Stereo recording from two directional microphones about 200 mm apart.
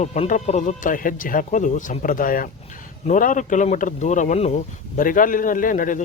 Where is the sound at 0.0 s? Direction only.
35° left (ahead or behind).